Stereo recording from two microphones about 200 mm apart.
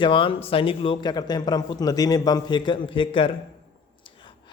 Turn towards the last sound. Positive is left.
turn(degrees=25)  # may be behind; listen again after turning